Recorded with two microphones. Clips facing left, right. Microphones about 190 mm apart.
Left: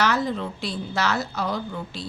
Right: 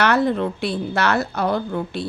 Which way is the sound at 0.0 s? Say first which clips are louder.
Right 5 dB; 60° right (ahead or behind).